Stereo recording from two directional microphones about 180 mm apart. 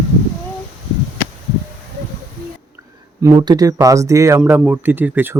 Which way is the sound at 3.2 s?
20° right (ahead or behind).